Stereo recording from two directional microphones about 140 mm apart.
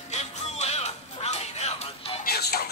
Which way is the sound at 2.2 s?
90° left.